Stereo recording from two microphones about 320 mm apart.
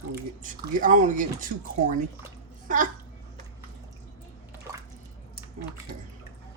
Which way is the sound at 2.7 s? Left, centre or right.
Right.